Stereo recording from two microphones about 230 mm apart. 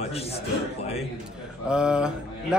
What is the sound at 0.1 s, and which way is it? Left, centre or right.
Speech, left.